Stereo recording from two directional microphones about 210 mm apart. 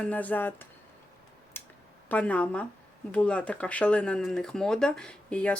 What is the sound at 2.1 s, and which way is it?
Speech, 5° left (ahead or behind).